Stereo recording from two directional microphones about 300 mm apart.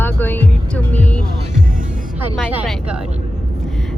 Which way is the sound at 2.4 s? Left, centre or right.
Centre.